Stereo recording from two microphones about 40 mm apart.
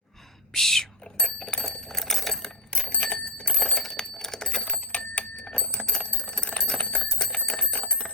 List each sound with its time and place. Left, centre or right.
0.5 s whispering: centre
1.7 s a sound: centre
2.8 s bicycle bell: left
3.1 s clock: left
3.5 s alarm clock: centre
4.7 s bicycle bell: left
5.5 s bell: left
6.1 s bicycle bell: left
6.3 s alarm clock: left
6.7 s bicycle bell: left